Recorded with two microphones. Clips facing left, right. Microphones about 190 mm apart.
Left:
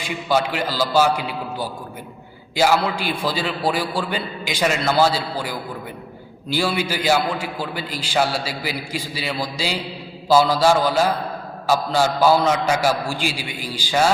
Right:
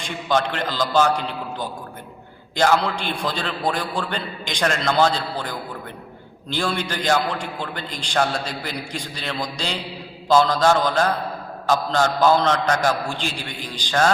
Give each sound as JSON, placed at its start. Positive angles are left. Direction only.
{"t": 0.0, "sound": "a man's voice", "side_deg": 5}